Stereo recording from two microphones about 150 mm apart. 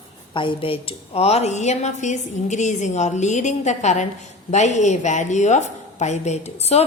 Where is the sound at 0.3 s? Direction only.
35° left (ahead or behind).